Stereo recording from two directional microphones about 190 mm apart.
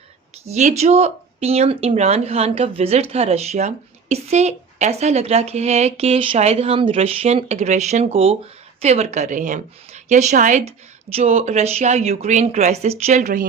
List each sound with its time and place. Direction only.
0.4 s speech: 35° right (ahead or behind)